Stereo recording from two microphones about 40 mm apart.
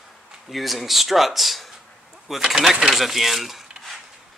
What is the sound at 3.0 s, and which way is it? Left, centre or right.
Cutlery, centre.